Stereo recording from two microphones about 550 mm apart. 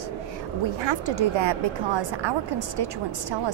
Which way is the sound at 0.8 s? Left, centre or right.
Right.